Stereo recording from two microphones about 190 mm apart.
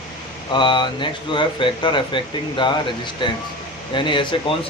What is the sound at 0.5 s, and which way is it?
Speech, 25° left (ahead or behind).